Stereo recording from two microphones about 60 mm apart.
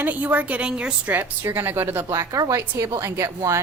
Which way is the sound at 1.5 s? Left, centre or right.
Right.